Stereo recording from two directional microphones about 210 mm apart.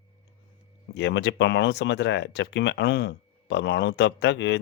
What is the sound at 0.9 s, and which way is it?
Speech, 60° left (ahead or behind).